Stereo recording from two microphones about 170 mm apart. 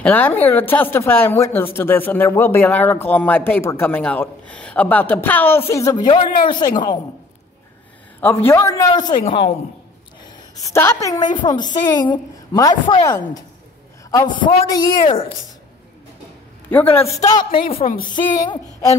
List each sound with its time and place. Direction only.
0.0 s a woman's voice: 10° left (ahead or behind); by 7.0 s 25° left (ahead or behind)
8.2 s a woman's voice: 10° left (ahead or behind)
10.5 s a woman's voice: 15° left (ahead or behind)
14.1 s a woman's voice: 25° left (ahead or behind)
16.6 s a woman's voice: 10° left (ahead or behind)
17.5 s a woman's voice: 35° left (ahead or behind)